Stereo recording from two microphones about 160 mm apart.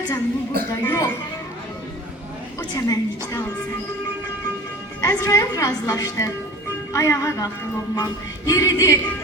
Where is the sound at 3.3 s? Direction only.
20° left (ahead or behind).